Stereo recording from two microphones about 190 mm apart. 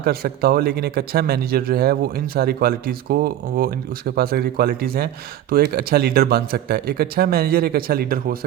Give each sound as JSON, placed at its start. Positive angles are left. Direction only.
{"t": 0.0, "sound": "speech", "side_deg": -55}